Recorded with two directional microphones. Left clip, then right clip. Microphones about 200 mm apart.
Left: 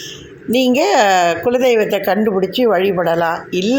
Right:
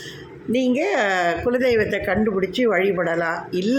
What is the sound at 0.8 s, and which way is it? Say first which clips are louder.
Speech: left 10 dB; 25° left (ahead or behind).